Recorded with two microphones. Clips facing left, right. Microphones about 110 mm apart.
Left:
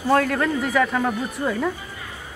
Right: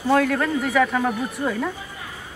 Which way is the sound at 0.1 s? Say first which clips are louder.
Even; centre (ahead or behind).